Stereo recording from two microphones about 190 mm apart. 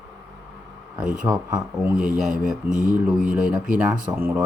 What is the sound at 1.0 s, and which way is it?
Speech, 5° right (ahead or behind).